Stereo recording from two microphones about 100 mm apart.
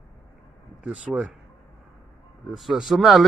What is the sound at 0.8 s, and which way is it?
Speech, 10° right (ahead or behind).